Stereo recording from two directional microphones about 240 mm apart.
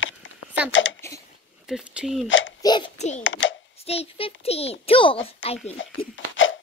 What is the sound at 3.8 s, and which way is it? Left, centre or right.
A child's voice, left.